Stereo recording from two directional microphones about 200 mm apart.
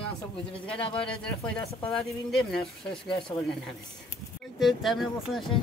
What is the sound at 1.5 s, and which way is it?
Speech, centre (ahead or behind).